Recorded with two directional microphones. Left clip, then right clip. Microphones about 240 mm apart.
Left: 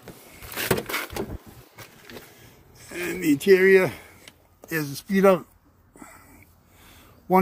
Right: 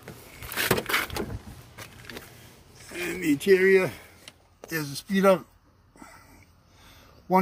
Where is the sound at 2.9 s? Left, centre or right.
Centre.